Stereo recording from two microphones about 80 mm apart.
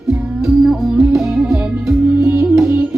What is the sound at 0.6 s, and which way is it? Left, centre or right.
Music, centre.